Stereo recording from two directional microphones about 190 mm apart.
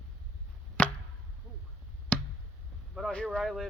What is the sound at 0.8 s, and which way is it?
Chop, 5° left (ahead or behind).